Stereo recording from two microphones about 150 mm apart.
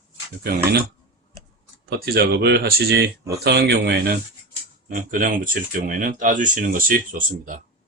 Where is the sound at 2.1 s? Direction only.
90° right.